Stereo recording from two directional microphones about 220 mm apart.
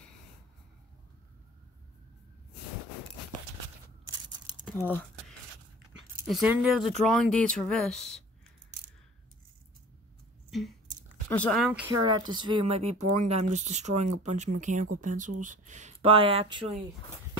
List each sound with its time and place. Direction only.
4.6 s speech: 5° left (ahead or behind)
6.2 s speech: 5° right (ahead or behind)
11.2 s speech: 5° left (ahead or behind)
11.9 s speech: 20° right (ahead or behind)